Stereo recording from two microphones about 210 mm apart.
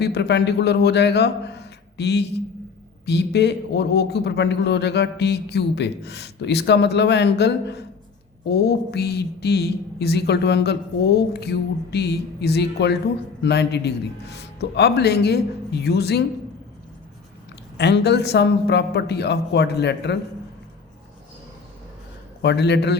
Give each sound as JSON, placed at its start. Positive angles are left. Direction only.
{"t": 0.0, "sound": "a man's voice", "side_deg": 50}
{"t": 17.7, "sound": "a man's voice", "side_deg": 55}
{"t": 22.4, "sound": "a man's voice", "side_deg": 55}